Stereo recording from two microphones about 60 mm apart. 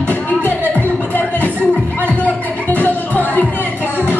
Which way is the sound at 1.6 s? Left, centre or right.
Right.